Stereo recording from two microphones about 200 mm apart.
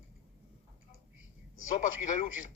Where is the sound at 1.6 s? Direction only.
40° left (ahead or behind).